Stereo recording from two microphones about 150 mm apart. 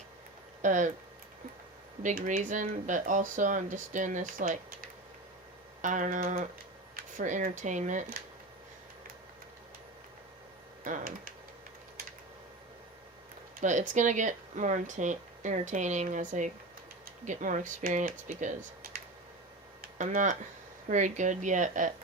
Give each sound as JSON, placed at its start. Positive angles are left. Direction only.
{"t": 0.6, "sound": "speech", "side_deg": -55}
{"t": 2.0, "sound": "speech", "side_deg": -60}
{"t": 5.8, "sound": "speech", "side_deg": -55}
{"t": 10.8, "sound": "speech", "side_deg": -65}
{"t": 13.6, "sound": "speech", "side_deg": -55}
{"t": 19.8, "sound": "tick-tock", "side_deg": -55}
{"t": 20.8, "sound": "speech", "side_deg": -55}